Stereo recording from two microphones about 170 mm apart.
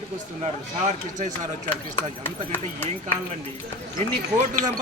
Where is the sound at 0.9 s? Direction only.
45° right (ahead or behind).